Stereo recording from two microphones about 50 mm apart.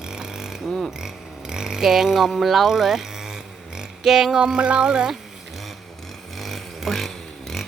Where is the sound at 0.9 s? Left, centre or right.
Centre.